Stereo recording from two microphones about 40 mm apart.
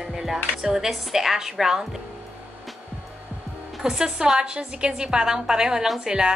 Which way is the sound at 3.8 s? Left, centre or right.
Centre.